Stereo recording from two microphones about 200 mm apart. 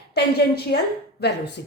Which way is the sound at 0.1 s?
55° left (ahead or behind).